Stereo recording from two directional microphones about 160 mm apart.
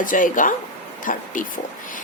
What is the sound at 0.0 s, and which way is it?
A woman's voice, 55° left (ahead or behind).